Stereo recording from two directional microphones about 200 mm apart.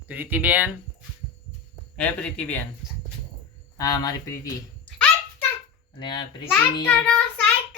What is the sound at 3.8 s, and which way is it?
Speech, 20° left (ahead or behind).